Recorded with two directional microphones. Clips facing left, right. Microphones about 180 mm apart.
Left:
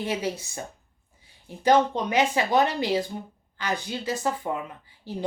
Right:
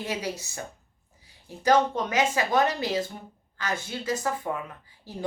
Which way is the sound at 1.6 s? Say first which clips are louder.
Left 2 dB; 20° left (ahead or behind).